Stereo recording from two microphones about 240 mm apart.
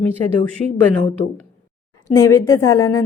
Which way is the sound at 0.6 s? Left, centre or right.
Left.